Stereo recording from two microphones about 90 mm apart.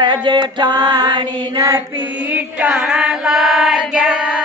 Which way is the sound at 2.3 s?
10° right (ahead or behind).